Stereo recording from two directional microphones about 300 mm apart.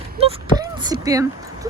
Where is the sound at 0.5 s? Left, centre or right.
Centre.